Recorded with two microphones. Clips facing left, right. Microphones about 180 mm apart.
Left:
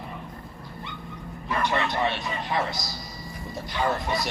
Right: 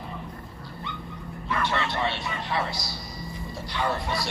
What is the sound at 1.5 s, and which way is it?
A man's voice, 20° left (ahead or behind).